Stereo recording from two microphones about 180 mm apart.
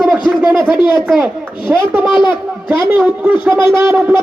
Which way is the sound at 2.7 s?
5° right (ahead or behind).